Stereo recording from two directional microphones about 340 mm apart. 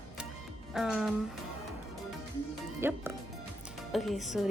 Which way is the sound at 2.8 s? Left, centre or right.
Centre.